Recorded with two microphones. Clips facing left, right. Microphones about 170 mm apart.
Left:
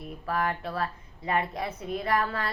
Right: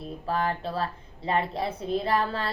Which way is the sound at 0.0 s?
30° right (ahead or behind).